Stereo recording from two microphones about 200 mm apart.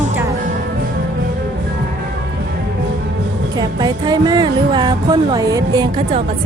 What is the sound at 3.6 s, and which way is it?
Music, 20° right (ahead or behind).